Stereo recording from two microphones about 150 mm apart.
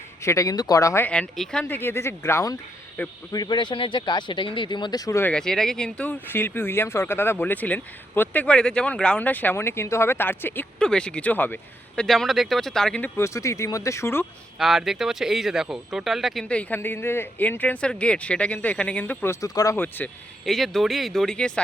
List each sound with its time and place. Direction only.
0.2 s speech: 20° left (ahead or behind)
3.3 s speech: 30° left (ahead or behind)
5.2 s speech: 5° left (ahead or behind)
12.0 s speech: centre (ahead or behind)
13.1 s speech: 20° left (ahead or behind)
14.6 s speech: centre (ahead or behind); by 20.1 s 15° left (ahead or behind)
20.4 s speech: centre (ahead or behind)